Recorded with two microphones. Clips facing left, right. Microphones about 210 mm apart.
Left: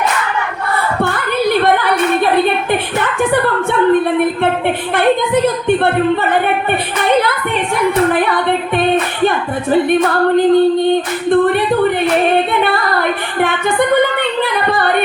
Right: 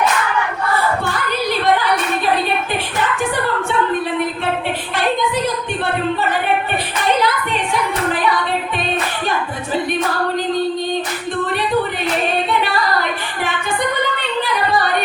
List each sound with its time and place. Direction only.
1.0 s a sound: 55° left (ahead or behind)
4.9 s speech: 55° left (ahead or behind)
8.1 s music: 55° left (ahead or behind)
9.9 s singing: 55° left (ahead or behind)
12.5 s female singing: 55° left (ahead or behind)
14.4 s singing: 55° left (ahead or behind)